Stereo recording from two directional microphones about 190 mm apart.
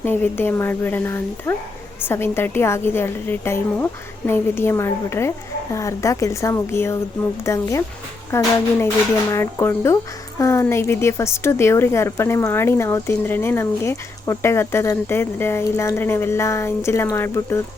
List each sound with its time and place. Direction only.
0.0 s speech: 10° left (ahead or behind)